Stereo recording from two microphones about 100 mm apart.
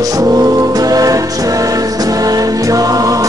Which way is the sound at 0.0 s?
35° right (ahead or behind).